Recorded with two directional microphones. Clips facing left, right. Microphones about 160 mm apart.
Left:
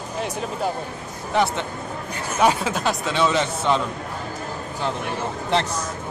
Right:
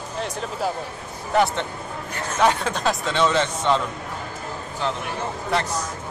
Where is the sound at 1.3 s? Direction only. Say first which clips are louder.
Right 1 dB; centre (ahead or behind).